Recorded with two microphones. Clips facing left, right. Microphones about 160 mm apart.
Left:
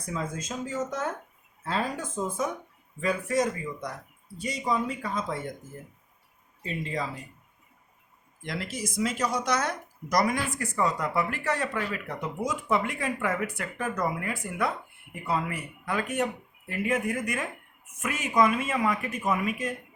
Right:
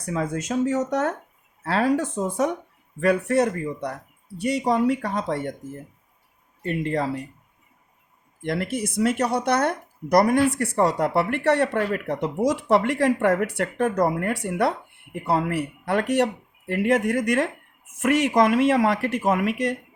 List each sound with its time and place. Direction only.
0.0 s speech: 70° right (ahead or behind)
6.6 s speech: 65° right (ahead or behind)
8.4 s speech: 60° right (ahead or behind); by 19.7 s 80° right